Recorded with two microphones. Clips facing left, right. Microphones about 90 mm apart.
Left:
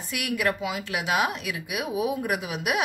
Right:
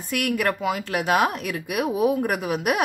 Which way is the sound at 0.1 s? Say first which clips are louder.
Right 3 dB; 45° right (ahead or behind).